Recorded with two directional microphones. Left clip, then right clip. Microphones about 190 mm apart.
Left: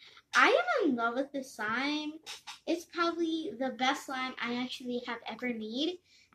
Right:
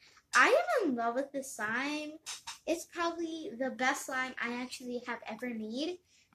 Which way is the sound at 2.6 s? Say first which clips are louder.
Left 2 dB; 15° right (ahead or behind).